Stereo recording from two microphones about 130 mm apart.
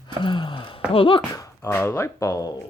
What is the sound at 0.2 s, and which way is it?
Sigh, 35° left (ahead or behind).